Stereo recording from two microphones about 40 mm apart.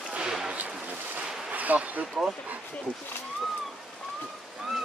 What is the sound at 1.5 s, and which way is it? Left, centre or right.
Speech, right.